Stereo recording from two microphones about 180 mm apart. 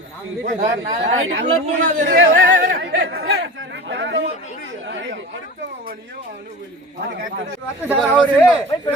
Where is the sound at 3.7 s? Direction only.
80° right.